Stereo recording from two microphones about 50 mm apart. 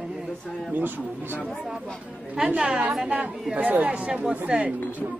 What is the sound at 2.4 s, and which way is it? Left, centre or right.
A woman's voice, right.